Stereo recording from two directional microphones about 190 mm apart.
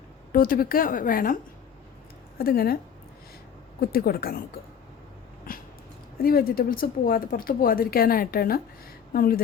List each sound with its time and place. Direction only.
0.3 s a woman's voice: 50° left (ahead or behind)
2.4 s a woman's voice: 55° left (ahead or behind)
3.8 s a woman's voice: 50° left (ahead or behind)
6.2 s a woman's voice: 50° left (ahead or behind)